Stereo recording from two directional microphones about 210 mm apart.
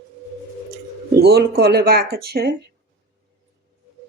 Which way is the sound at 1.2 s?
50° right (ahead or behind).